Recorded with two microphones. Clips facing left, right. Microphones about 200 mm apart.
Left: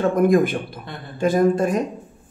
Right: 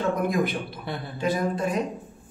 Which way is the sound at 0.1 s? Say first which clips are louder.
Left 8 dB; 50° left (ahead or behind).